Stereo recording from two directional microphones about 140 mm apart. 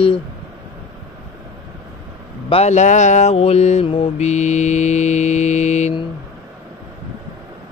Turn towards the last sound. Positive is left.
turn(degrees=55)  # may be behind; listen again after turning